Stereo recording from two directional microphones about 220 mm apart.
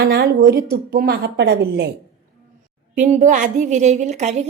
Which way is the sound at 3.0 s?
35° right (ahead or behind).